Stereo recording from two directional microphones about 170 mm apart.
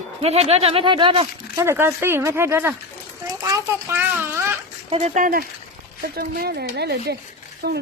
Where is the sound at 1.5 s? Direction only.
15° right (ahead or behind).